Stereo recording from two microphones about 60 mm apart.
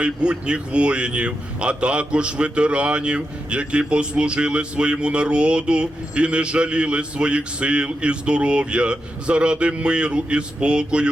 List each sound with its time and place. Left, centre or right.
0.0 s speech: centre